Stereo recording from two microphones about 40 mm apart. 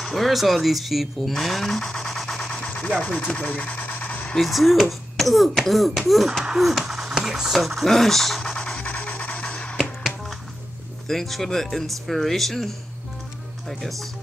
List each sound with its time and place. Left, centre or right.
0.0 s speech: centre
1.8 s a sound: centre
2.5 s rub: left
3.0 s speech: left
3.3 s a sound: left
4.4 s speech: centre
7.5 s speech: centre
8.4 s music: centre
8.8 s music: left
11.1 s speech: centre